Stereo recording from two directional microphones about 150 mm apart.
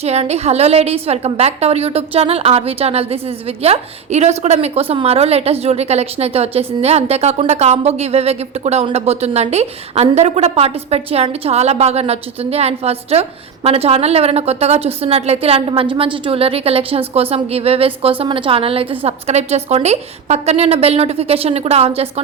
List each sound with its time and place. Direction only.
0.0 s a woman's voice: 45° right (ahead or behind)